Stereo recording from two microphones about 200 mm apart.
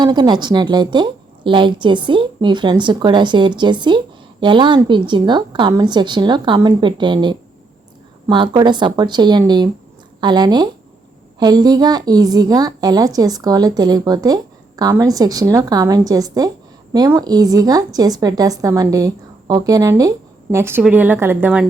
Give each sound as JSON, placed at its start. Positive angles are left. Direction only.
{"t": 0.0, "sound": "a woman's voice", "side_deg": -20}